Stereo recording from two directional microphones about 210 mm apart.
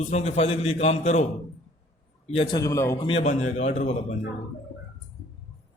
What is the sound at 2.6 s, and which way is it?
Speech, 15° left (ahead or behind).